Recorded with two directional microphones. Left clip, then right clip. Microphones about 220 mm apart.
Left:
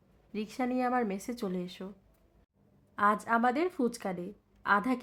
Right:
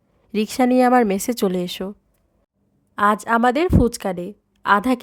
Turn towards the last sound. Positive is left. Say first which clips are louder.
# right 11 dB
turn(degrees=-45)  # may be behind; listen again after turning